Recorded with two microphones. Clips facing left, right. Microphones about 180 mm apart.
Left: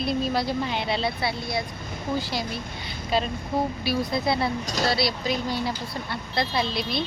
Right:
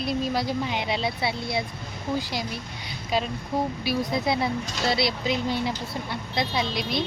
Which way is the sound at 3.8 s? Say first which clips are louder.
Even; 15° right (ahead or behind).